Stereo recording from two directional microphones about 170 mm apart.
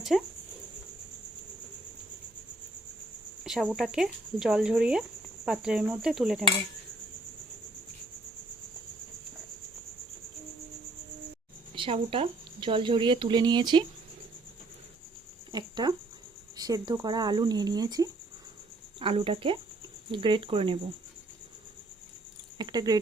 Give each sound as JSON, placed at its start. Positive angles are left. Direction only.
{"t": 3.4, "sound": "speech", "side_deg": 0}
{"t": 11.7, "sound": "speech", "side_deg": -30}
{"t": 15.5, "sound": "speech", "side_deg": -25}
{"t": 22.5, "sound": "cricket", "side_deg": -25}